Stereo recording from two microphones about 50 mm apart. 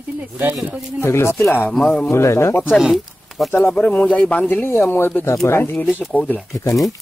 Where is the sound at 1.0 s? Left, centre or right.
Left.